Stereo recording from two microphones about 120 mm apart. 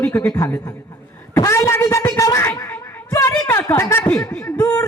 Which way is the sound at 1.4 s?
25° left (ahead or behind).